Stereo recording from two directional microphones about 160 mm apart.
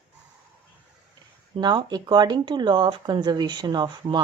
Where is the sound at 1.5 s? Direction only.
30° right (ahead or behind).